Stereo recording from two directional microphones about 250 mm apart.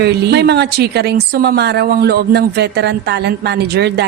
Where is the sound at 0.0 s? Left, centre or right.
Right.